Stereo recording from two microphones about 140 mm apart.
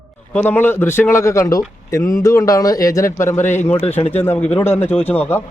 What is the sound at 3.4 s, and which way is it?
Speech, 60° left (ahead or behind).